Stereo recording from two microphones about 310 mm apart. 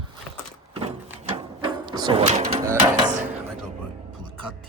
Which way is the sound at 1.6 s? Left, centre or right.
Centre.